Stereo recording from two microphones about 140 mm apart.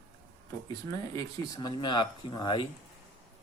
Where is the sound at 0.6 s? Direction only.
25° left (ahead or behind).